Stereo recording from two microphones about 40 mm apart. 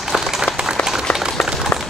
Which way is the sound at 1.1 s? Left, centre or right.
Left.